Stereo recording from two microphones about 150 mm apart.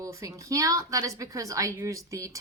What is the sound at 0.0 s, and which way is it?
A woman's voice, 20° right (ahead or behind).